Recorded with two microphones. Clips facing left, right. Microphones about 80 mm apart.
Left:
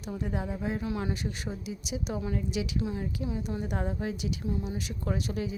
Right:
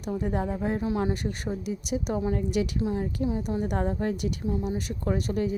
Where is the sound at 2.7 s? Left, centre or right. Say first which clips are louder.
Right 4 dB; right.